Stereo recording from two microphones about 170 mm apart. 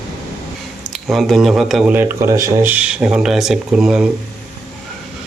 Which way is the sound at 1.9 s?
15° right (ahead or behind).